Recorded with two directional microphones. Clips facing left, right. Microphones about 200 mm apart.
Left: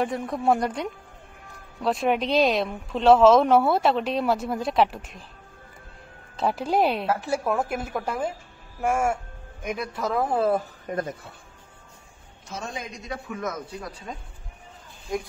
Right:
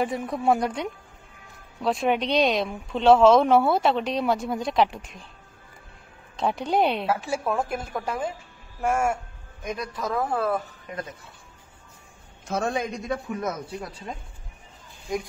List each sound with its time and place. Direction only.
0.0 s a woman's voice: centre (ahead or behind)
6.3 s a woman's voice: centre (ahead or behind)
10.3 s speech: 25° left (ahead or behind)
10.9 s speech: 55° left (ahead or behind)
12.4 s a man's voice: 65° right (ahead or behind)
13.4 s speech: 30° right (ahead or behind)